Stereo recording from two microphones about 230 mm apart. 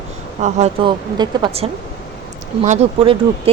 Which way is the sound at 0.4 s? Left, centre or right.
Right.